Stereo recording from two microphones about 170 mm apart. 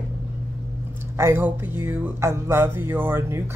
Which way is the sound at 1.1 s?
15° right (ahead or behind).